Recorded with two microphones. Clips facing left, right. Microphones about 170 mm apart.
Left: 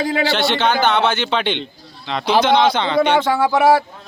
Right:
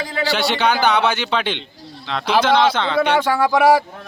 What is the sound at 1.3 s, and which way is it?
A man's voice, centre (ahead or behind).